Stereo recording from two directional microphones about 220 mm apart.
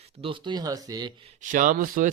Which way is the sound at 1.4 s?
35° right (ahead or behind).